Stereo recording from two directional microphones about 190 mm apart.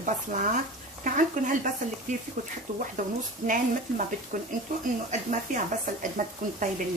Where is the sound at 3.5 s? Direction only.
45° right (ahead or behind).